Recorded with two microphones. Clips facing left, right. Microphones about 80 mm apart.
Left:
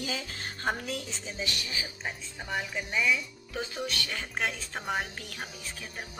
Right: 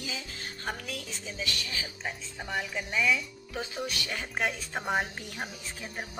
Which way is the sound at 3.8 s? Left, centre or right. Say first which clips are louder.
Even; centre.